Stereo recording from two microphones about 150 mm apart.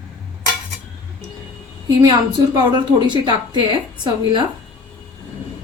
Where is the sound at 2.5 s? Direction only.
30° right (ahead or behind).